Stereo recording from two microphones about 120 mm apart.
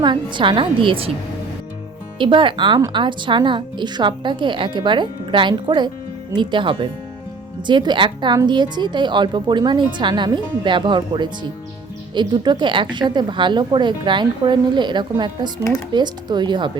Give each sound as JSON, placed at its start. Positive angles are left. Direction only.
{"t": 0.0, "sound": "a woman's voice", "side_deg": -40}
{"t": 2.1, "sound": "speech", "side_deg": -45}